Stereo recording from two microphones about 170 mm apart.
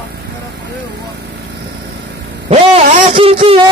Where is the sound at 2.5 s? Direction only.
50° right (ahead or behind).